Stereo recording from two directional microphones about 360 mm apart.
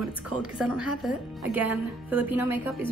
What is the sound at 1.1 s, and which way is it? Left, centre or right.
Speech, centre.